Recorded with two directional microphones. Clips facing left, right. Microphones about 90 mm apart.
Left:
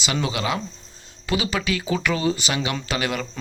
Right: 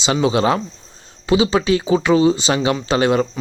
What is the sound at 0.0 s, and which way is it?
Speech, 25° right (ahead or behind).